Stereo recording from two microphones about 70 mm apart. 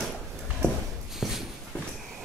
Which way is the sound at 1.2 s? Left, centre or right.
Centre.